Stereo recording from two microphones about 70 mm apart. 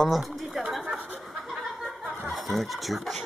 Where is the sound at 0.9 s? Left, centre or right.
Right.